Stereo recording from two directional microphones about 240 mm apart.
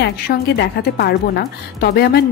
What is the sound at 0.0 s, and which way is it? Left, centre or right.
A woman's voice, left.